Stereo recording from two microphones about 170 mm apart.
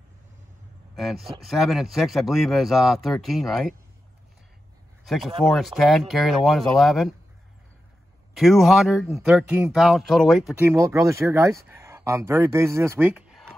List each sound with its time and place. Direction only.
0.9 s speech: centre (ahead or behind)
5.0 s speech: centre (ahead or behind)
8.4 s speech: centre (ahead or behind)
10.6 s speech: 15° right (ahead or behind)
13.1 s a sound: centre (ahead or behind)